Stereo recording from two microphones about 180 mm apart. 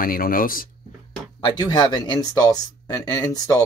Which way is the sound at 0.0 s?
55° left (ahead or behind).